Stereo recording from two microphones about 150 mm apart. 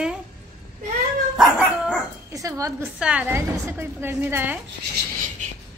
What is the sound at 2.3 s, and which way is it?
Speech, 20° right (ahead or behind).